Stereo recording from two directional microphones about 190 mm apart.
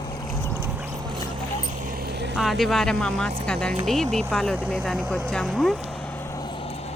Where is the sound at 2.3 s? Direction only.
Centre (ahead or behind).